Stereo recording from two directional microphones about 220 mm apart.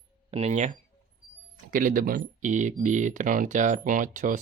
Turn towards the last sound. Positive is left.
turn(degrees=-35)  # may be behind; listen again after turning